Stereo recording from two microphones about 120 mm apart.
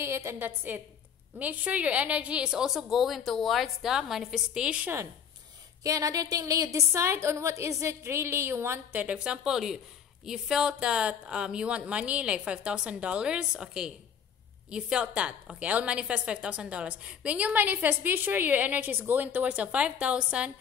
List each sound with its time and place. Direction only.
0.0 s a woman's voice: 20° right (ahead or behind)
5.9 s a woman's voice: 30° right (ahead or behind)
9.0 s a woman's voice: 10° right (ahead or behind)